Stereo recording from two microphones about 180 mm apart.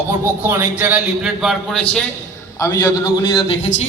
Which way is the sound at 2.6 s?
15° left (ahead or behind).